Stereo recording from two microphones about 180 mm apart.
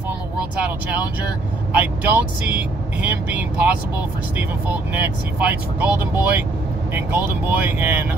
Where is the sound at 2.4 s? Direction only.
10° right (ahead or behind).